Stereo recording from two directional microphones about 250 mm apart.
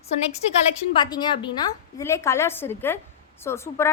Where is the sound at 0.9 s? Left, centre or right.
Centre.